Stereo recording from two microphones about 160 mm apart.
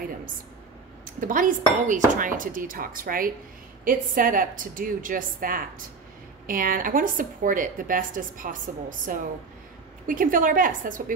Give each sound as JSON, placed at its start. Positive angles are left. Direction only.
{"t": 1.0, "sound": "speech", "side_deg": -55}